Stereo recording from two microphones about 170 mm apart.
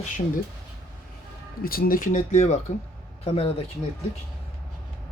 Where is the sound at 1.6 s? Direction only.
60° left (ahead or behind); by 3.6 s 35° left (ahead or behind).